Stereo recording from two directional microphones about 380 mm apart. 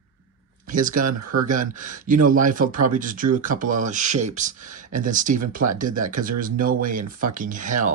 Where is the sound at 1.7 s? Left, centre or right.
Centre.